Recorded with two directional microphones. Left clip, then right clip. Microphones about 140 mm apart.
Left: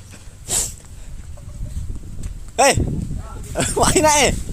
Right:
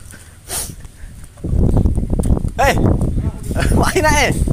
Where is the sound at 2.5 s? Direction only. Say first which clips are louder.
Even; 55° left (ahead or behind).